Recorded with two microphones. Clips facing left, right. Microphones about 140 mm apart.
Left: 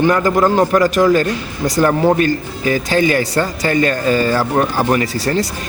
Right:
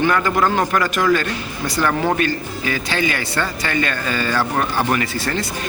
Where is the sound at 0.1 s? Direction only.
35° left (ahead or behind).